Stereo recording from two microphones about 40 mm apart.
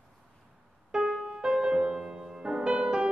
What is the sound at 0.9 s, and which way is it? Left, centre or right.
Piano, centre.